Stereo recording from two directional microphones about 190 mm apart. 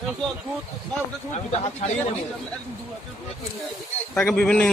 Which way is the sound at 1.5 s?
35° left (ahead or behind).